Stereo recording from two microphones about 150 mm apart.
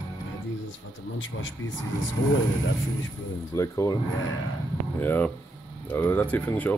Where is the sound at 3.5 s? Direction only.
20° left (ahead or behind).